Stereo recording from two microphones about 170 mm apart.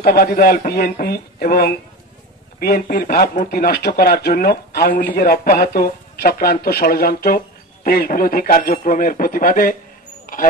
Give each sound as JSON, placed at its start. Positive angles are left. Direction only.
{"t": 0.0, "sound": "speech", "side_deg": 60}